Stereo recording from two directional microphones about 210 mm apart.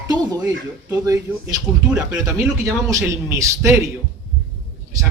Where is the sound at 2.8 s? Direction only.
15° right (ahead or behind).